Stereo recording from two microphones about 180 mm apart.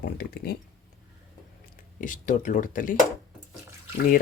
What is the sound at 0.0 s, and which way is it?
Speech, 60° left (ahead or behind).